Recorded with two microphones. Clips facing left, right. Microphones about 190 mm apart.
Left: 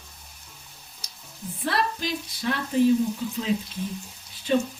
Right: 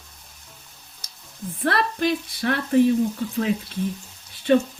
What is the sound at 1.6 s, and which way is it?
Speech, 60° right (ahead or behind).